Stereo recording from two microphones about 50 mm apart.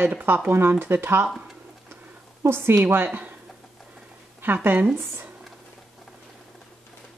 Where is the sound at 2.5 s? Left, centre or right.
Right.